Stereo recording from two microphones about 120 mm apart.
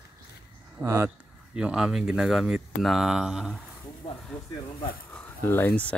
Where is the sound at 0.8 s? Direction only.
25° right (ahead or behind).